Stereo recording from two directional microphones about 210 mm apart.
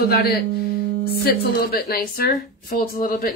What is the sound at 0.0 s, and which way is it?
Speech, 45° left (ahead or behind).